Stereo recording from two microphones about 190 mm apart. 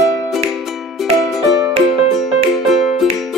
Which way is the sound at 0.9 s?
Centre (ahead or behind).